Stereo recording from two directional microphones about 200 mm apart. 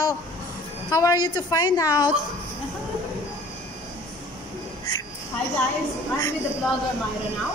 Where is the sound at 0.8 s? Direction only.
15° left (ahead or behind).